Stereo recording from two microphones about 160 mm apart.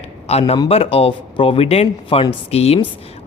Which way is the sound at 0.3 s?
40° left (ahead or behind).